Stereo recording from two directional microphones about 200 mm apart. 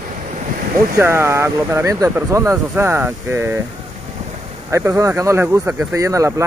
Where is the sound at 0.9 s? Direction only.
15° right (ahead or behind).